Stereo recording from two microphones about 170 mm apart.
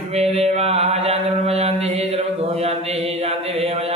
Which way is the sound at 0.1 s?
40° right (ahead or behind).